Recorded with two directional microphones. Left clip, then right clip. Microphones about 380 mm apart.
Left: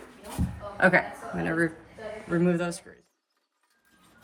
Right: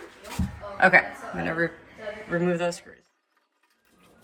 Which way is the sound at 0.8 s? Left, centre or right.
Centre.